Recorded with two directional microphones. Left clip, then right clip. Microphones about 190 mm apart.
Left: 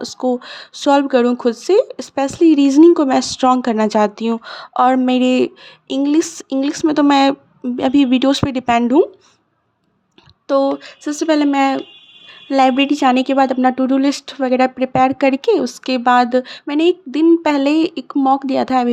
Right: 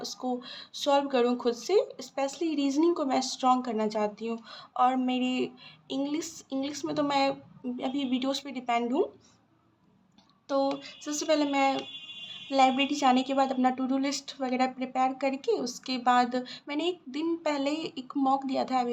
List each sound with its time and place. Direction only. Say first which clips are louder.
0.0 s speech: left 14 dB; 40° left (ahead or behind)
10.5 s speech: left 13 dB; 45° left (ahead or behind)